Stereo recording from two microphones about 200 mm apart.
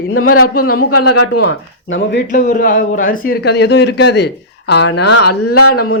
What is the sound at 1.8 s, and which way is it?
Speech, 70° left (ahead or behind).